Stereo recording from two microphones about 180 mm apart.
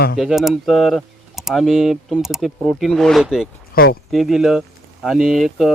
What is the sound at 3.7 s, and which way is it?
Speech, 55° left (ahead or behind).